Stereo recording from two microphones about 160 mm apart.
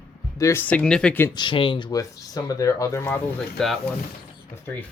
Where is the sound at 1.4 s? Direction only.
30° left (ahead or behind); by 3.2 s 15° left (ahead or behind).